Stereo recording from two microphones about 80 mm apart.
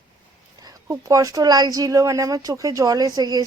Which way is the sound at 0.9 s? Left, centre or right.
Right.